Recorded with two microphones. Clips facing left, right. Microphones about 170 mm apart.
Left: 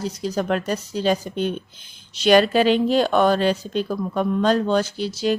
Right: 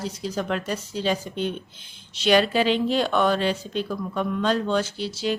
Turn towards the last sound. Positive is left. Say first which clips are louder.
# left 4 dB
turn(degrees=45)  # may be behind; listen again after turning